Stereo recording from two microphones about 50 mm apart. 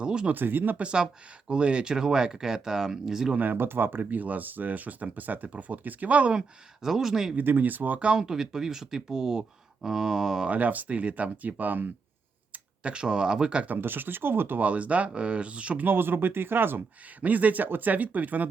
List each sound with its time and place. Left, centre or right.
0.0 s a sound: centre
0.3 s speech: right
0.8 s speech: right
3.3 s speech: right
4.1 s speech: right
6.8 s speech: centre
7.3 s speech: right
8.0 s speech: centre
10.5 s speech: right
12.8 s speech: centre
13.7 s speech: right
14.6 s speech: right
15.9 s speech: right